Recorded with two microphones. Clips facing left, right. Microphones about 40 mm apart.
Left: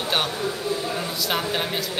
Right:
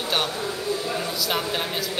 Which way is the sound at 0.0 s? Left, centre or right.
Centre.